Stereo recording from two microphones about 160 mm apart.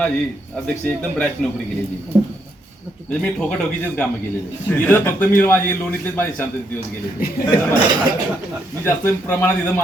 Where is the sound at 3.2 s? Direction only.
5° left (ahead or behind).